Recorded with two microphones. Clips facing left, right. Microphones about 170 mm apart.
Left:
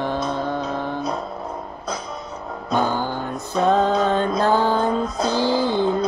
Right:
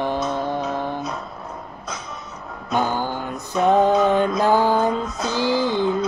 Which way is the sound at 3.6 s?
15° right (ahead or behind).